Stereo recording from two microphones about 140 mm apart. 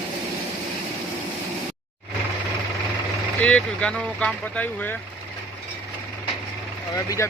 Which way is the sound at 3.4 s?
10° left (ahead or behind).